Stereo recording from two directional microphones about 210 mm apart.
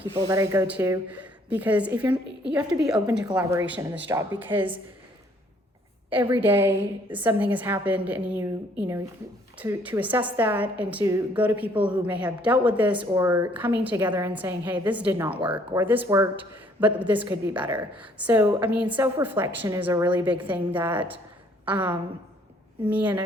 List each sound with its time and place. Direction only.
0.3 s a woman's voice: 15° right (ahead or behind)
6.1 s a woman's voice: 10° right (ahead or behind)
9.6 s a woman's voice: 10° right (ahead or behind)